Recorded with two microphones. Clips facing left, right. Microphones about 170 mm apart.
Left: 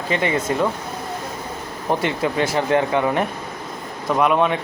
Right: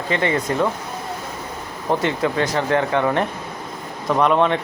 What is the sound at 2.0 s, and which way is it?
Speech, 20° left (ahead or behind).